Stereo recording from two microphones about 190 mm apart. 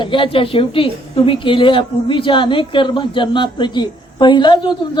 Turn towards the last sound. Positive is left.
turn(degrees=25)  # may be behind; listen again after turning